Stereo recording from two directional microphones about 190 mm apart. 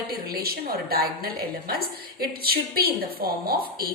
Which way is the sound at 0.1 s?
55° right (ahead or behind).